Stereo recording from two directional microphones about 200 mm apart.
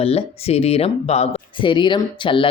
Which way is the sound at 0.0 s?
30° left (ahead or behind).